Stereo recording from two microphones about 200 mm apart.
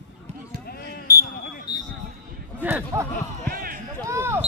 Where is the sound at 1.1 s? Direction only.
15° left (ahead or behind).